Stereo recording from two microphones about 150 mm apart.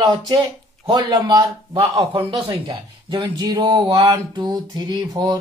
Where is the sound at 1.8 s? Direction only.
35° right (ahead or behind).